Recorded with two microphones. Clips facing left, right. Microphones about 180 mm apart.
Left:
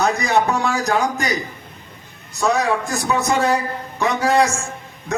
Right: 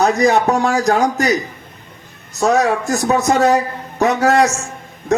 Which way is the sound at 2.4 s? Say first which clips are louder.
Right 4 dB; 40° right (ahead or behind).